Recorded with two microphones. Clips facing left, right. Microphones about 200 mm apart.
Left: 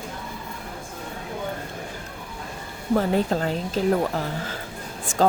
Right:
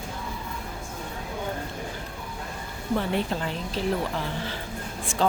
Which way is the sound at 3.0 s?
40° left (ahead or behind).